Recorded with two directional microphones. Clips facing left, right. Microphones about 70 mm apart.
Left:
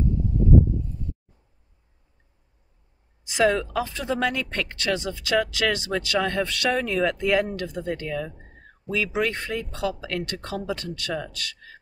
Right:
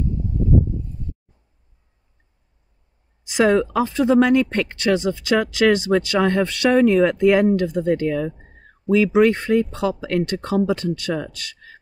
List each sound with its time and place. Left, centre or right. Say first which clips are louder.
3.3 s speech: right 5 dB; right